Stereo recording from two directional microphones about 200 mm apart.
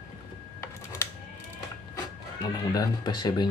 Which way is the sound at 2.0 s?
20° left (ahead or behind).